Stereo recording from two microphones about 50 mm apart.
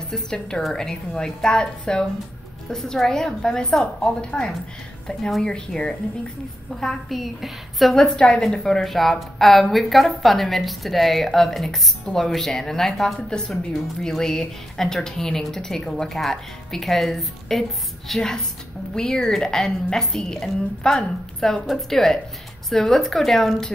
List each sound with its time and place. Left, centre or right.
0.1 s a woman's voice: centre
5.7 s a woman's voice: centre